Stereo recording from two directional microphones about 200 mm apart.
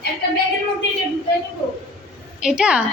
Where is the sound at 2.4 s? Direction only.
5° right (ahead or behind).